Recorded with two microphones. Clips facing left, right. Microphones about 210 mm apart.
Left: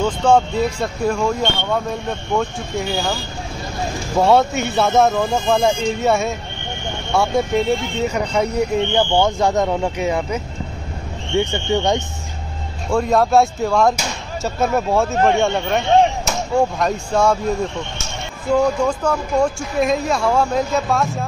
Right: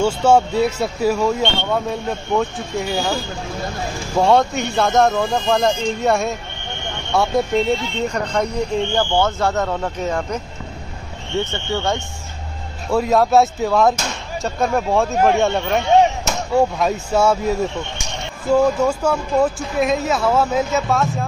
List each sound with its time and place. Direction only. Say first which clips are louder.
0.0 s speech: right 1 dB; 5° right (ahead or behind)
4.2 s speech: left 1 dB; 5° left (ahead or behind)
12.9 s speech: even; 5° right (ahead or behind)